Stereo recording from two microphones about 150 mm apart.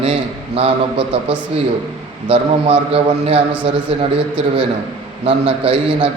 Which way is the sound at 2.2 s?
40° right (ahead or behind).